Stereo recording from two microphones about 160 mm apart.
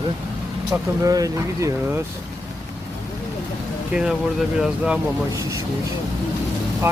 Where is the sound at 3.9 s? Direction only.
5° right (ahead or behind).